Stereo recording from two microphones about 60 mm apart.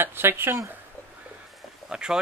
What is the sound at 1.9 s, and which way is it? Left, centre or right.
Speech, centre.